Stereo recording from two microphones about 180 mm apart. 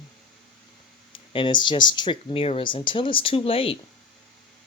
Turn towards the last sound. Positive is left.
turn(degrees=30)  # may be behind; listen again after turning